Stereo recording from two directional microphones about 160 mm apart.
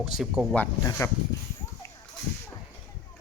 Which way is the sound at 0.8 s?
15° left (ahead or behind).